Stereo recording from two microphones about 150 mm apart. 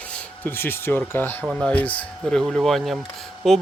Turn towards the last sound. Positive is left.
turn(degrees=0)  # may be behind; listen again after turning